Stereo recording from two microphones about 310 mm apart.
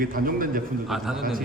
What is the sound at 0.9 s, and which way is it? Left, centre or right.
Speech, centre.